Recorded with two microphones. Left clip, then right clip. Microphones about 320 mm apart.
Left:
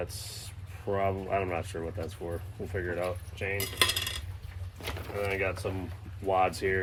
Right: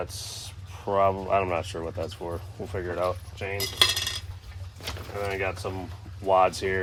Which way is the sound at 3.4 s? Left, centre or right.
Centre.